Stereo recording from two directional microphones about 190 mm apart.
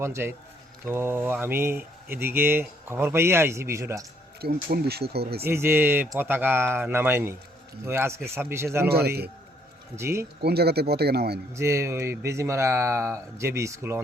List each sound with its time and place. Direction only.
0.0 s speech: 15° right (ahead or behind)
4.4 s speech: 55° right (ahead or behind)
5.5 s speech: 10° right (ahead or behind)
8.9 s speech: 55° right (ahead or behind)
9.9 s speech: 15° right (ahead or behind)
10.4 s speech: 55° right (ahead or behind)
11.5 s speech: 15° right (ahead or behind)